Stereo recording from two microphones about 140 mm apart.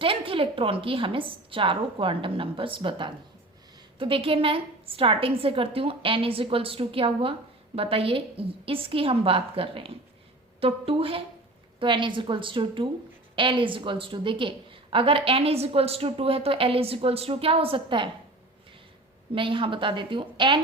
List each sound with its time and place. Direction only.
0.0 s a woman's voice: 40° right (ahead or behind)
19.3 s a woman's voice: 40° right (ahead or behind)